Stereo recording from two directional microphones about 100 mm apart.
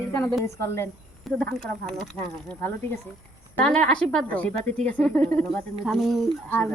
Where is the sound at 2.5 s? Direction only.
20° left (ahead or behind).